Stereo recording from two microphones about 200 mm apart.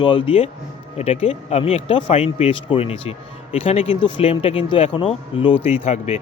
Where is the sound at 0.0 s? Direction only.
25° left (ahead or behind).